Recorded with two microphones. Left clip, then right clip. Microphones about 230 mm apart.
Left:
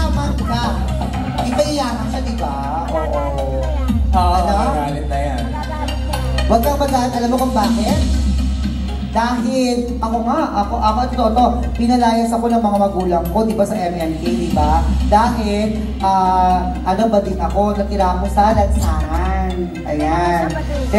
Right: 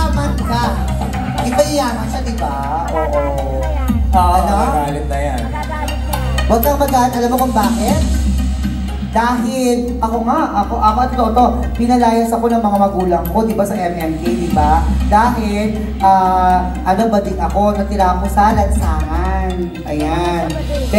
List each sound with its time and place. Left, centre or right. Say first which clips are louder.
1.4 s a sound: right 3 dB; right
4.1 s music: right 3 dB; right
6.5 s speech: right 2 dB; right
9.1 s a woman's voice: right 2 dB; right
20.9 s a woman's voice: right 1 dB; right